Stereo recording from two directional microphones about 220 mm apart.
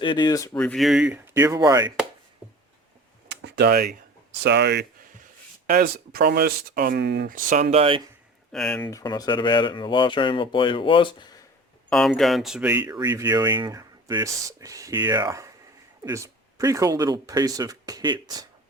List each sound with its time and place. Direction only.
0.0 s speech: 20° left (ahead or behind)
0.5 s speech: 5° left (ahead or behind); by 1.9 s 15° right (ahead or behind)
3.2 s computer keyboard: 50° right (ahead or behind)
4.4 s speech: 50° right (ahead or behind); by 8.0 s 25° right (ahead or behind)
8.5 s speech: 5° left (ahead or behind)
8.9 s speech: 15° left (ahead or behind)
11.9 s speech: 5° left (ahead or behind); by 18.4 s 20° right (ahead or behind)